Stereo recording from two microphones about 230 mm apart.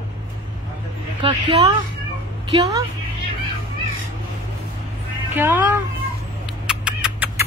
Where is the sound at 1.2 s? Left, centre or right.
Right.